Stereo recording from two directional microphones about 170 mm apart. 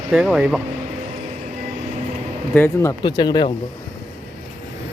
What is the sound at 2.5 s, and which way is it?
Speech, 15° left (ahead or behind).